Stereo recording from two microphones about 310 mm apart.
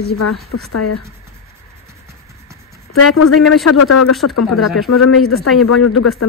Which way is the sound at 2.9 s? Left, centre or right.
Left.